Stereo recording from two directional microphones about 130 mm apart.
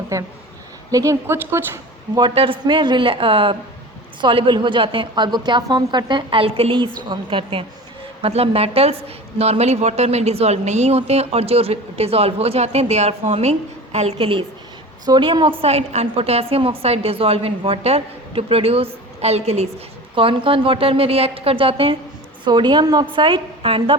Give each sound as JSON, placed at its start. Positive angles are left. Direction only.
{"t": 0.1, "sound": "speech", "side_deg": -25}
{"t": 2.3, "sound": "a woman's voice", "side_deg": -45}
{"t": 15.6, "sound": "speech", "side_deg": -55}
{"t": 20.1, "sound": "a woman's voice", "side_deg": -45}